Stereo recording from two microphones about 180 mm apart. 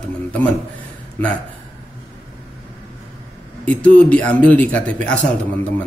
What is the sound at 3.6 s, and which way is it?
Speech, 5° left (ahead or behind).